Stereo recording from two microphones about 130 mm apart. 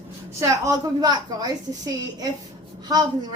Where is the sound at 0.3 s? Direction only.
25° right (ahead or behind).